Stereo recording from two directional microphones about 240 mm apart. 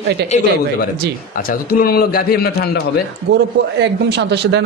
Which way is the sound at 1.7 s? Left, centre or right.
Left.